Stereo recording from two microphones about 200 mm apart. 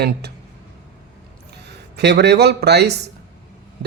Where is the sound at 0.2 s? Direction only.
55° right (ahead or behind).